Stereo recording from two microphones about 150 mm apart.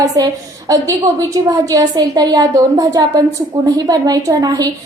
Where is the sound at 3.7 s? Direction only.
25° right (ahead or behind).